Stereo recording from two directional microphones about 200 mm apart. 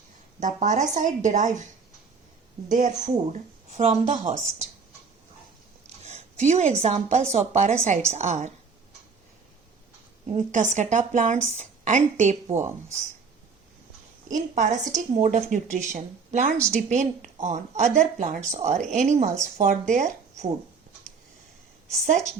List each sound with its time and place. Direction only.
0.3 s a woman's voice: 40° right (ahead or behind)
2.6 s a woman's voice: 40° right (ahead or behind)
6.0 s a woman's voice: 35° right (ahead or behind)
10.3 s a woman's voice: 35° right (ahead or behind)
14.3 s a woman's voice: 40° right (ahead or behind)
21.8 s a woman's voice: 35° right (ahead or behind)